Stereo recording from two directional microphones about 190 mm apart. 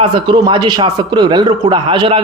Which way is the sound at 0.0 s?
25° right (ahead or behind).